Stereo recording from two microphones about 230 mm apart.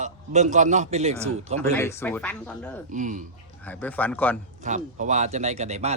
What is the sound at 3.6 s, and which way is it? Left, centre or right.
Speech, centre.